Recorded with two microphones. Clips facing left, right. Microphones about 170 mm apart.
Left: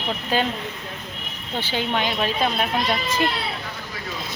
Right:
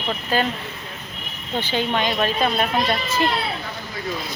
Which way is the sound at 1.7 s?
10° left (ahead or behind).